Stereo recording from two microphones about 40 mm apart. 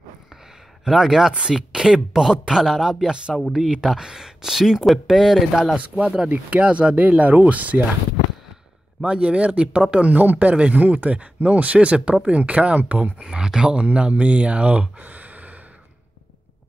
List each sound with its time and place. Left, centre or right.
0.8 s speech: centre
5.8 s speech: right
7.0 s speech: right
9.0 s speech: right
10.1 s speech: right
13.2 s speech: centre; by 15.5 s right